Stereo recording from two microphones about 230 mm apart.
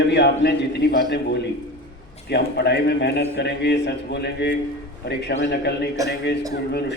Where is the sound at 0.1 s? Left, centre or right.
Left.